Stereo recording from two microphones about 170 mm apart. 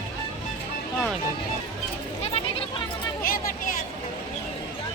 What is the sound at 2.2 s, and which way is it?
Goat, 35° left (ahead or behind).